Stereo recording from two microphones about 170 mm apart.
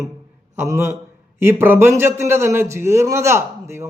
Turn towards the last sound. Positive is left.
turn(degrees=-15)  # may be behind; listen again after turning